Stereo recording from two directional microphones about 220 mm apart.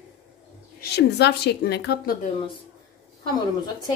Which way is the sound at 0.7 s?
45° left (ahead or behind).